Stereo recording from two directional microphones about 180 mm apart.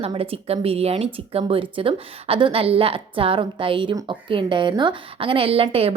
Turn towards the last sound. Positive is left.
turn(degrees=-30)  # may be behind; listen again after turning